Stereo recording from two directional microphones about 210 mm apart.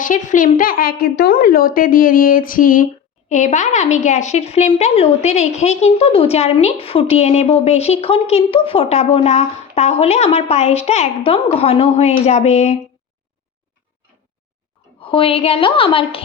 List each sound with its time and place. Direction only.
0.0 s a woman's voice: 35° left (ahead or behind)
15.0 s a woman's voice: 25° left (ahead or behind)